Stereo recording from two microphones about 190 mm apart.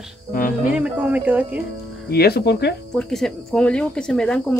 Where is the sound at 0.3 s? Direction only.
45° left (ahead or behind).